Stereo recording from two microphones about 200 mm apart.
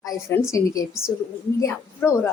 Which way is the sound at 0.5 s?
15° left (ahead or behind).